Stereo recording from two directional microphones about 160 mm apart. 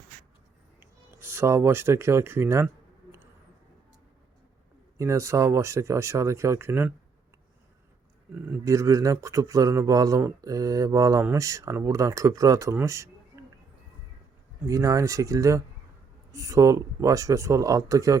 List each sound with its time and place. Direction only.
0.8 s speech: 15° right (ahead or behind)
4.9 s speech: 20° right (ahead or behind)
8.4 s speech: 20° right (ahead or behind)
14.7 s speech: 20° right (ahead or behind)